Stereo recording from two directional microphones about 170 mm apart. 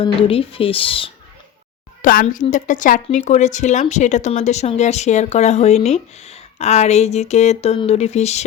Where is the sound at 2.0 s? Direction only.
55° left (ahead or behind).